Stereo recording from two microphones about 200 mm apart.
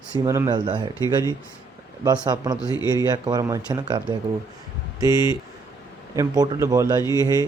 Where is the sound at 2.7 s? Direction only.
20° left (ahead or behind).